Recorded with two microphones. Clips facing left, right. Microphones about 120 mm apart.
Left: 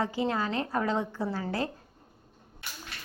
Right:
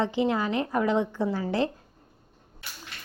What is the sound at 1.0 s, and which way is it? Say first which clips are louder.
Speech: right 5 dB; 5° left (ahead or behind).